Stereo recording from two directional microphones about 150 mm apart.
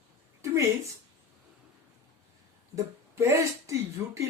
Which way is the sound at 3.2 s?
20° right (ahead or behind).